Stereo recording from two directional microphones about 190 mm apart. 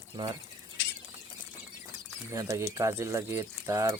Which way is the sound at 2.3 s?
15° right (ahead or behind).